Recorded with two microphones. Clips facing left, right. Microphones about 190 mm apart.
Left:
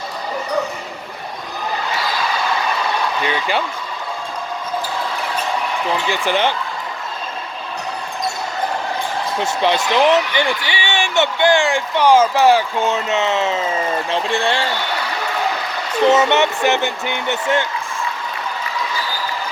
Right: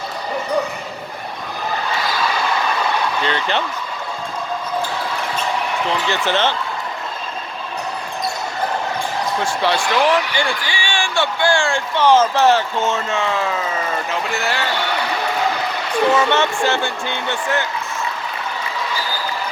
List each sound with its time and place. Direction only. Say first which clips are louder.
3.2 s speech: even; 10° left (ahead or behind)
6.1 s speech: left 1 dB; 15° left (ahead or behind)
9.4 s speech: left 3 dB; 20° left (ahead or behind)
16.0 s speech: left 3 dB; 20° left (ahead or behind)